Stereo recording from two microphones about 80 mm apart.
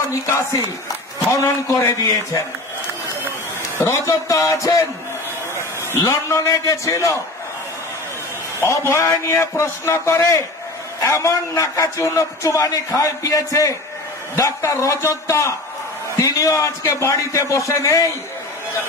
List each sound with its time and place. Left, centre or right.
0.3 s a man's voice: left
3.2 s a sound: right
3.8 s a man's voice: left
5.9 s a man's voice: left
8.5 s a man's voice: left